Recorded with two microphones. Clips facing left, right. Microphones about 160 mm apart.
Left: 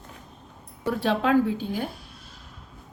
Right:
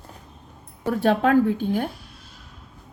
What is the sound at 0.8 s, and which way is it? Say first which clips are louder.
A woman's voice: right 4 dB; 50° right (ahead or behind).